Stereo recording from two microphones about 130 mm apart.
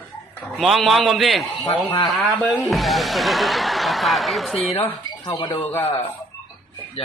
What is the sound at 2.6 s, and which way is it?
Speech, centre (ahead or behind).